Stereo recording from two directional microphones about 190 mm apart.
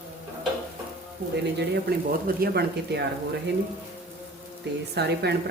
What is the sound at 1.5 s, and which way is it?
Speech, 60° right (ahead or behind).